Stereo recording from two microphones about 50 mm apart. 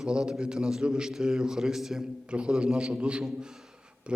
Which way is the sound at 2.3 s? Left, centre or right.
Centre.